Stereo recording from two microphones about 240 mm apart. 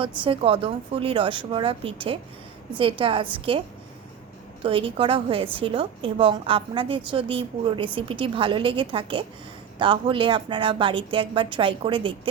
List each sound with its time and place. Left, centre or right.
0.0 s a woman's voice: right
4.6 s a woman's voice: right